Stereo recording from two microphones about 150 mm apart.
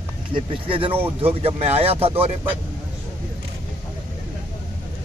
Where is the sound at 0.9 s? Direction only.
15° right (ahead or behind).